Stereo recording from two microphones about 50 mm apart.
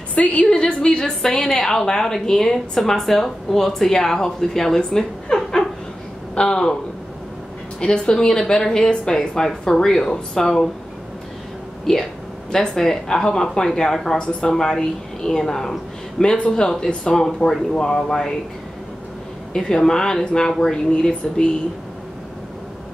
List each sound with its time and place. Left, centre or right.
0.1 s a woman's voice: left
0.5 s a woman's voice: centre
8.0 s a woman's voice: centre
11.8 s a woman's voice: centre
19.5 s a woman's voice: centre